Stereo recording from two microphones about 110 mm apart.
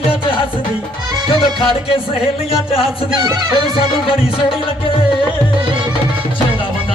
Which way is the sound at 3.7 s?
55° left (ahead or behind).